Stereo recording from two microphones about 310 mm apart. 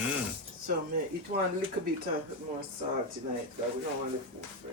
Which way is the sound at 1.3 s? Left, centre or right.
Right.